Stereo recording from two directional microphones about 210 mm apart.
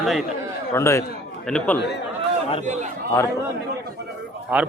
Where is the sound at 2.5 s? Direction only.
35° right (ahead or behind).